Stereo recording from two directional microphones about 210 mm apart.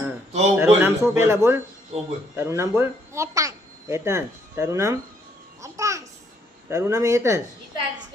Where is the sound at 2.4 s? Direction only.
10° right (ahead or behind).